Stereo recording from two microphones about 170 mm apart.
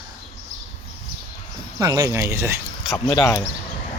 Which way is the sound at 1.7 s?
20° right (ahead or behind).